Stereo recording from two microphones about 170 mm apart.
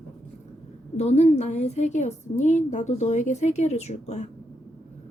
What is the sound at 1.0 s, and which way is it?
A woman's voice, 40° left (ahead or behind).